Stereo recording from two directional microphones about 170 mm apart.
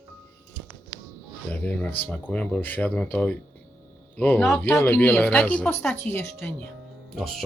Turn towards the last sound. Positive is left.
turn(degrees=0)  # may be behind; listen again after turning